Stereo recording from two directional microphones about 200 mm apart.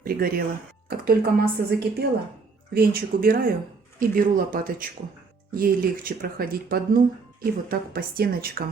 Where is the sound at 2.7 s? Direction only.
50° right (ahead or behind).